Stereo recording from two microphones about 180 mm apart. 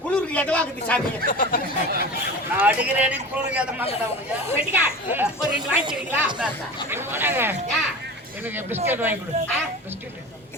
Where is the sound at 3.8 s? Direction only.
35° left (ahead or behind).